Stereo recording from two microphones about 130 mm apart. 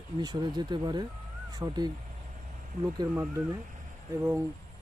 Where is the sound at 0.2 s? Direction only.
35° right (ahead or behind).